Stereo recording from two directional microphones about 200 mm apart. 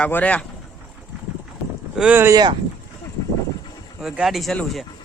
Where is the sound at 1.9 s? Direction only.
5° right (ahead or behind).